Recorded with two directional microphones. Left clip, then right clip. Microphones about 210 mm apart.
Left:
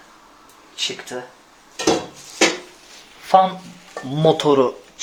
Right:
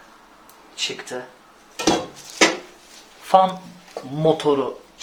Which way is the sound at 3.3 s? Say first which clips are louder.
Left 1 dB; 10° left (ahead or behind).